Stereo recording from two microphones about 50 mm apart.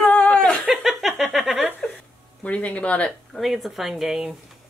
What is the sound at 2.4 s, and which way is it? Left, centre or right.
Speech, left.